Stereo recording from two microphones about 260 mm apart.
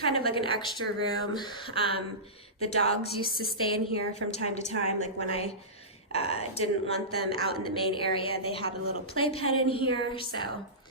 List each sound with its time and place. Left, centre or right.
0.0 s a woman's voice: left
6.1 s a woman's voice: left